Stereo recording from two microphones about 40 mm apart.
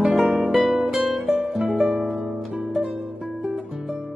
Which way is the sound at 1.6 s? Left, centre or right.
Right.